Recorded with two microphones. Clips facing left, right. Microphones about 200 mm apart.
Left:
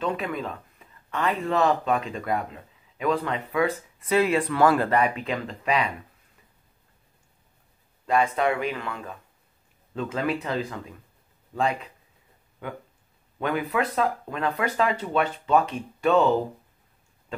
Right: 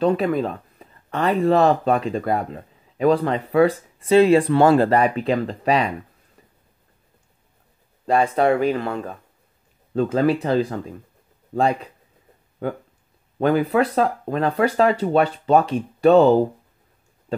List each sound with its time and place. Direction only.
0.0 s speech: 35° right (ahead or behind)
8.1 s speech: 35° right (ahead or behind)